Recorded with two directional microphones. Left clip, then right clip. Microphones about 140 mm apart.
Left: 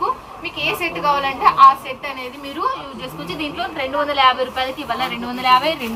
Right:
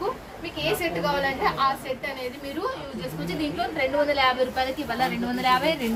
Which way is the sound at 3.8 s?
45° right (ahead or behind).